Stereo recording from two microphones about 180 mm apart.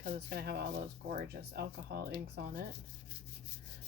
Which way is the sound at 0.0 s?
55° right (ahead or behind).